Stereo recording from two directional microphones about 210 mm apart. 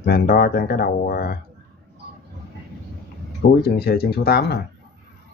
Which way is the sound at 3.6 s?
50° left (ahead or behind).